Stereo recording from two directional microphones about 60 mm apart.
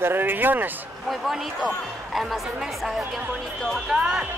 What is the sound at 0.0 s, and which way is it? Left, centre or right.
Speech, right.